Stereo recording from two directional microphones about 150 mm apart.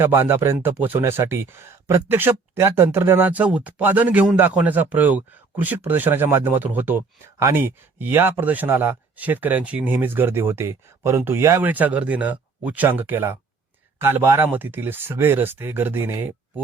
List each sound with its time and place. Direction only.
0.0 s speech: 15° right (ahead or behind)